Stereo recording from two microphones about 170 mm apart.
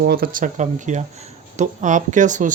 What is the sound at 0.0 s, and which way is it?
Speech, 65° right (ahead or behind).